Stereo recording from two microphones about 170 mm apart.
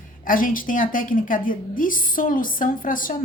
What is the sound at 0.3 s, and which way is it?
A woman's voice, 55° left (ahead or behind).